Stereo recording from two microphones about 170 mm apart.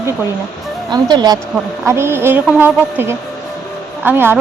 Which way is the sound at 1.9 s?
15° right (ahead or behind).